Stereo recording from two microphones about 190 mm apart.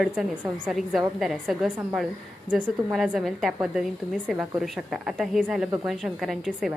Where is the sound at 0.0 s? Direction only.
Centre (ahead or behind).